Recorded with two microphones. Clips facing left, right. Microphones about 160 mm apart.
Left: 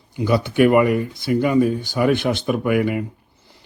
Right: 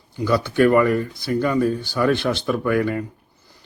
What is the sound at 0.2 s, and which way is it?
Speech, 20° left (ahead or behind).